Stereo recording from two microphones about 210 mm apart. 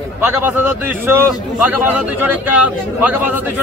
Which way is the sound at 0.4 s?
10° right (ahead or behind).